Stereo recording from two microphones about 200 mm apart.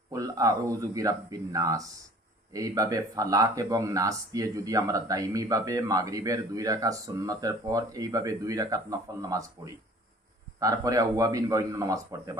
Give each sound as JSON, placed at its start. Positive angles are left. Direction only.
{"t": 0.1, "sound": "speech", "side_deg": -15}
{"t": 10.6, "sound": "speech", "side_deg": -15}